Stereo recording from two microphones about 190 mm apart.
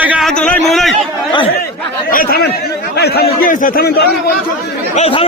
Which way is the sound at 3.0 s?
55° left (ahead or behind).